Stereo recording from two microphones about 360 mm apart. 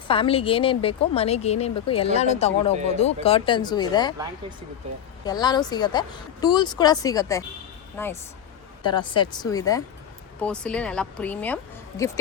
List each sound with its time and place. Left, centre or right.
0.1 s a woman's voice: centre
5.2 s a woman's voice: centre